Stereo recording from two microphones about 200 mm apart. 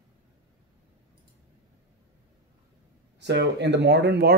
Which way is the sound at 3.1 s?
60° right (ahead or behind).